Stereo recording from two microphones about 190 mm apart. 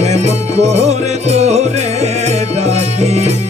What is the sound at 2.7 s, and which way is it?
Music, 35° right (ahead or behind).